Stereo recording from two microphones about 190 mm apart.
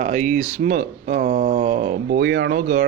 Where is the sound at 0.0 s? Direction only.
40° right (ahead or behind).